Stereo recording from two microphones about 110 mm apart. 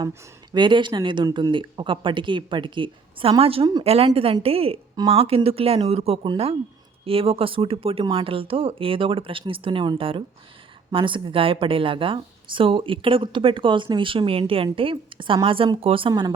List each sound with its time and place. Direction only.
0.5 s speech: 45° right (ahead or behind)